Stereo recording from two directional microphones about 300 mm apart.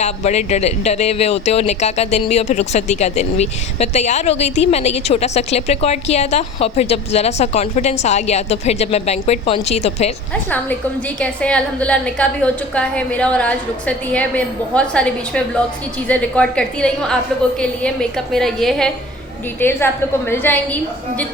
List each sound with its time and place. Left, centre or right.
0.0 s speech: left
11.2 s a woman's voice: centre